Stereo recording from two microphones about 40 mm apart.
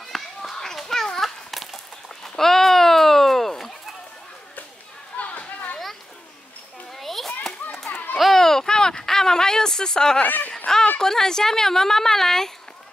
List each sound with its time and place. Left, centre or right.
0.1 s children playing: centre
1.2 s horse: centre
5.1 s chatter: left
6.9 s children playing: centre
7.9 s children playing: left
8.2 s a sound: centre
10.2 s speech: left
11.0 s speech: centre